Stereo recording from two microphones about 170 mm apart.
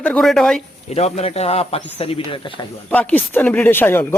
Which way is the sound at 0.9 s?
40° left (ahead or behind).